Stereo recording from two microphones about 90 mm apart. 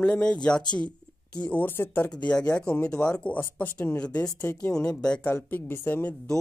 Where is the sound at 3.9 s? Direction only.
10° left (ahead or behind).